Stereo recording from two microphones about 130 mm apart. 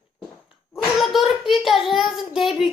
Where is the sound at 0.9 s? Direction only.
Centre (ahead or behind).